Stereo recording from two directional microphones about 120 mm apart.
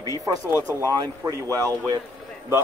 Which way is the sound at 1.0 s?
30° right (ahead or behind).